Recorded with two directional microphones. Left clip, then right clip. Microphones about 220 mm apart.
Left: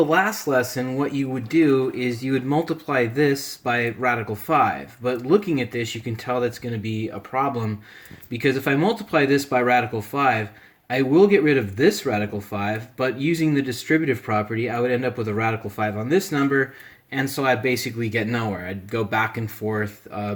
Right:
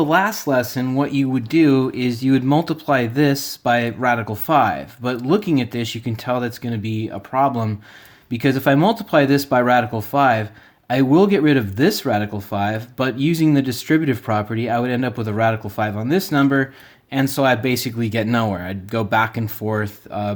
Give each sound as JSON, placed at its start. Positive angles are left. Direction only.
{"t": 0.0, "sound": "speech", "side_deg": -40}